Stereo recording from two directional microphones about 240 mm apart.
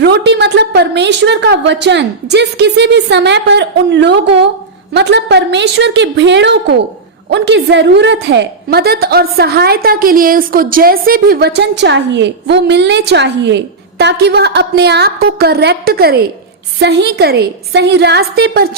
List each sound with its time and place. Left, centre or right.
0.0 s a woman's voice: right